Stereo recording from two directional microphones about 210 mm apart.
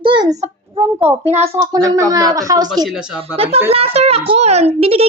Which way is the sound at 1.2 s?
30° right (ahead or behind).